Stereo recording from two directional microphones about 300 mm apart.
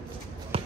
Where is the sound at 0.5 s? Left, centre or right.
Centre.